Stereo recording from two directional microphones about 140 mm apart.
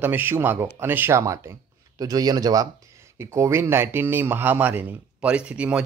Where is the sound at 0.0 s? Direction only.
15° right (ahead or behind).